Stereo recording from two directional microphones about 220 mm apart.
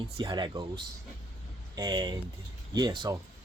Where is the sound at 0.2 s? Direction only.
20° right (ahead or behind).